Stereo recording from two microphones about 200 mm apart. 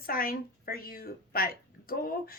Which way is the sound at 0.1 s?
45° left (ahead or behind).